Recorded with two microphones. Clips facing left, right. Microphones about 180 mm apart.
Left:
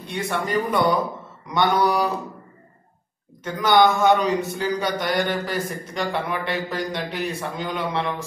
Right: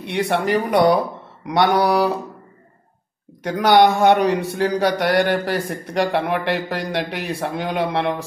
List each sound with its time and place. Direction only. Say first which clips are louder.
0.0 s speech: right 6 dB; 70° right (ahead or behind)
3.4 s a man's voice: right 3 dB; 70° right (ahead or behind)